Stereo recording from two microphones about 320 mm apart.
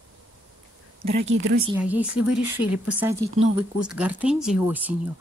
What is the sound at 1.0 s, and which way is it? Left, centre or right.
Speech, right.